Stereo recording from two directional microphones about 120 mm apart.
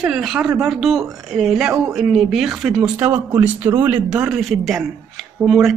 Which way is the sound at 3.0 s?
15° right (ahead or behind).